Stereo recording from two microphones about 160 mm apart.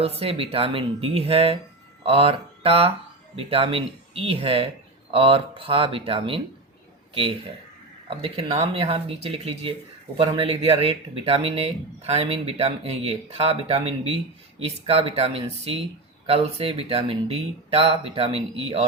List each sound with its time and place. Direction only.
0.0 s speech: 40° right (ahead or behind)